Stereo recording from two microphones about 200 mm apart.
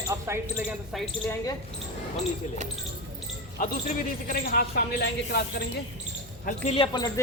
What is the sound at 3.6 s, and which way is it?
Speech, 40° left (ahead or behind).